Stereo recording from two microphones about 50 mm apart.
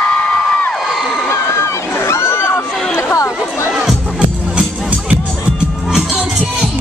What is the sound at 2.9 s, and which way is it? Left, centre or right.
Chatter, left.